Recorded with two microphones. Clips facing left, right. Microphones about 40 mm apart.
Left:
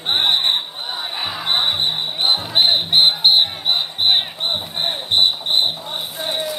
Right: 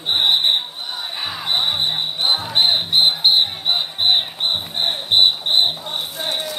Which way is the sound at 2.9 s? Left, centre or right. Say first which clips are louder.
Left 2 dB; left.